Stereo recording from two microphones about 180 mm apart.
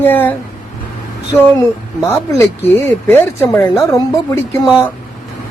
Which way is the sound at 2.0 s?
15° left (ahead or behind).